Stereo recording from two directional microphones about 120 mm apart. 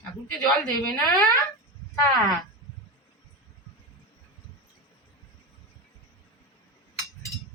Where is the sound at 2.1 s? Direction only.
30° left (ahead or behind).